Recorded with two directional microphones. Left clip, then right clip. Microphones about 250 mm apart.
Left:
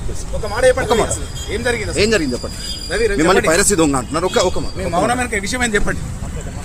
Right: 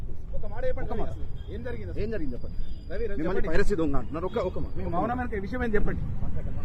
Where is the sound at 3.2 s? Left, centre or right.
Left.